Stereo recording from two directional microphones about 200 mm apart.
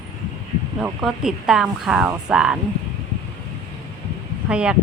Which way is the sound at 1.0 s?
Centre (ahead or behind).